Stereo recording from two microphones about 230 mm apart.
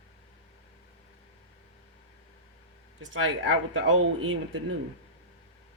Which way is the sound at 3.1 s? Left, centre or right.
Right.